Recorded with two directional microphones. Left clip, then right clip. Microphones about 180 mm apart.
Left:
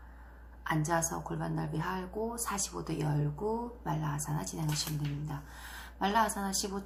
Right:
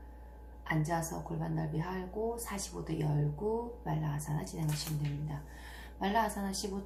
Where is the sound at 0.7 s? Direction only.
5° left (ahead or behind).